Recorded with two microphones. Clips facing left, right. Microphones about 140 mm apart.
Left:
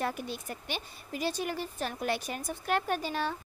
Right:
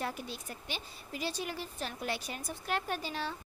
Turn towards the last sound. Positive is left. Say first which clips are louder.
# left 5 dB
turn(degrees=50)  # may be behind; listen again after turning